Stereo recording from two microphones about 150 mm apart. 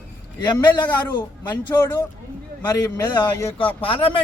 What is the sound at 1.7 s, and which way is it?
Speech, 15° left (ahead or behind).